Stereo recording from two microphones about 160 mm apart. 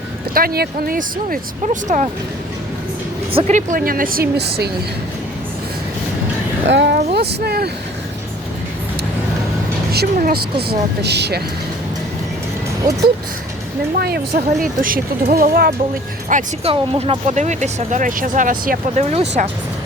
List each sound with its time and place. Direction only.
0.3 s speech: 70° right (ahead or behind)
1.6 s speech: 50° right (ahead or behind)
3.3 s speech: 45° right (ahead or behind); by 4.7 s 85° right
6.7 s speech: 90° right
9.9 s speech: 70° right (ahead or behind); by 11.4 s 90° right
12.9 s speech: 55° right (ahead or behind)
14.0 s speech: 70° right (ahead or behind)
16.3 s speech: 55° right (ahead or behind)
16.6 s speech: 40° right (ahead or behind); by 18.8 s 60° right (ahead or behind)
18.9 s speech: 40° right (ahead or behind)